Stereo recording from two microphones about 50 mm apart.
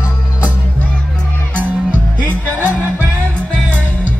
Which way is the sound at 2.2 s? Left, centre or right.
Left.